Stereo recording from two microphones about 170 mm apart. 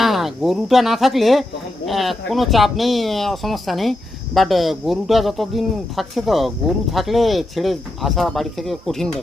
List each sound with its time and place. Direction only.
0.0 s a man's voice: centre (ahead or behind)